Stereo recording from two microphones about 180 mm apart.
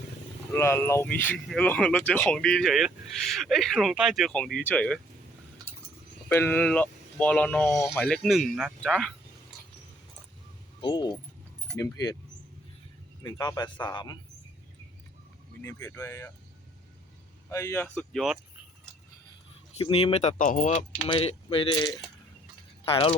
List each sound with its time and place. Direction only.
0.5 s speech: 15° left (ahead or behind)
6.2 s speech: 10° left (ahead or behind)
10.8 s speech: 25° left (ahead or behind)
13.2 s speech: 20° left (ahead or behind)
15.6 s speech: 15° left (ahead or behind)
17.5 s speech: 15° left (ahead or behind)
19.8 s speech: 30° left (ahead or behind); by 20.8 s 50° left (ahead or behind)
21.1 s speech: 30° left (ahead or behind)